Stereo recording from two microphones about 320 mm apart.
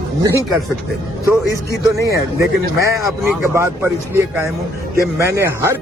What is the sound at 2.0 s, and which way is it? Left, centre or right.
Speech, centre.